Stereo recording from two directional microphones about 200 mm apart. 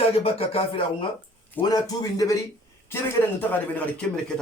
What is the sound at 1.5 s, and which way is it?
Speech, 20° left (ahead or behind).